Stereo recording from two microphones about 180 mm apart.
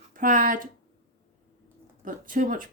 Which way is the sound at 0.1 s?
50° right (ahead or behind).